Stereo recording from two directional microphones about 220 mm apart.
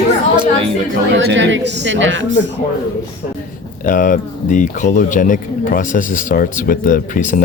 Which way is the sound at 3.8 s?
40° left (ahead or behind).